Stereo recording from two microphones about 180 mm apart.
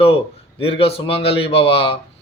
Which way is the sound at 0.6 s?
30° left (ahead or behind).